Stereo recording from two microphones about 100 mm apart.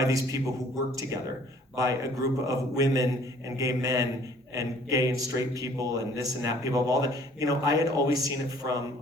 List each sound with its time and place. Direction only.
0.0 s a man's voice: 35° right (ahead or behind)
1.7 s a man's voice: 35° right (ahead or behind)